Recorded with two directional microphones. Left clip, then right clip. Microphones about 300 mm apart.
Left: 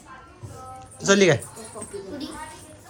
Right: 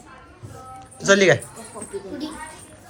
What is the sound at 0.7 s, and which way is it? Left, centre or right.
Music, centre.